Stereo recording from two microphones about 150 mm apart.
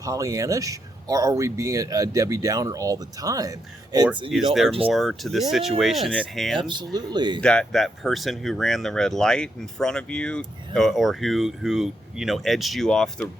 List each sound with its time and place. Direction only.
0.0 s speech: 20° right (ahead or behind)
4.3 s speech: centre (ahead or behind)
6.6 s speech: 30° right (ahead or behind)
7.4 s speech: 5° left (ahead or behind)